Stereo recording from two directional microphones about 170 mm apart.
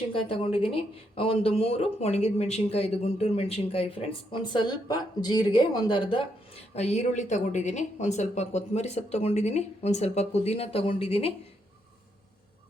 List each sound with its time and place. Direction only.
0.1 s speech: 30° left (ahead or behind)